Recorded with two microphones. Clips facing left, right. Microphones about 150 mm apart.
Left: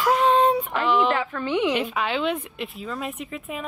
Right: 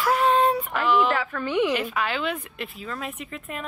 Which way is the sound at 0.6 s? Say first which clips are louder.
Even; 5° right (ahead or behind).